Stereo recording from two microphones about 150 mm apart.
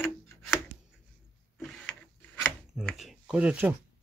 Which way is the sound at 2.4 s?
Centre (ahead or behind).